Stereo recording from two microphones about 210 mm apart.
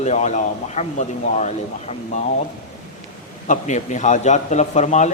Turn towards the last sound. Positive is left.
turn(degrees=35)  # may be behind; listen again after turning